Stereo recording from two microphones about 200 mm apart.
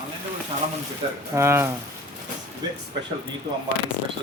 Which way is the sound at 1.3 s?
10° right (ahead or behind).